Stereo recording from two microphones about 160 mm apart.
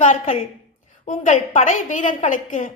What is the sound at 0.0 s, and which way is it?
A woman's voice, 50° left (ahead or behind).